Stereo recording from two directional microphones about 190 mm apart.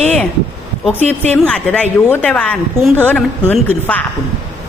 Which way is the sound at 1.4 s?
5° left (ahead or behind).